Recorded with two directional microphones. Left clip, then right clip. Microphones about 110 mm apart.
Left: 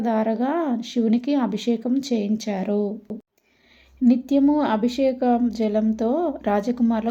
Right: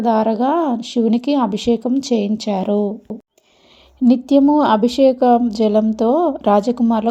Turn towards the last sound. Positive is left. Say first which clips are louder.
# right 8 dB
turn(degrees=-40)  # may be behind; listen again after turning